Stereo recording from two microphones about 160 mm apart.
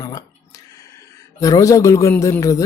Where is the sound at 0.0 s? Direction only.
20° left (ahead or behind).